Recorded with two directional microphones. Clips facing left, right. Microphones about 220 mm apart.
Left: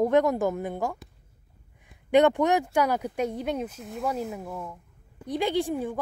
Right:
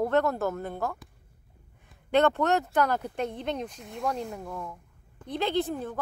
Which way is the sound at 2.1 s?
15° left (ahead or behind).